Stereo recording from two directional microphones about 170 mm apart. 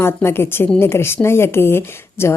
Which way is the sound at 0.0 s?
15° left (ahead or behind).